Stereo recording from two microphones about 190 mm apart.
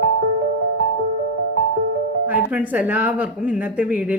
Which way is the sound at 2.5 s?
10° right (ahead or behind).